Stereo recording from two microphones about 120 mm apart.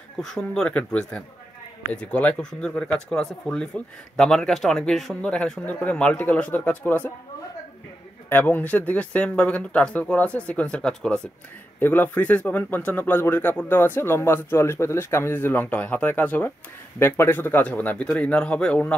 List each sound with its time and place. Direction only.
0.2 s speech: 5° left (ahead or behind)
8.3 s speech: 15° left (ahead or behind)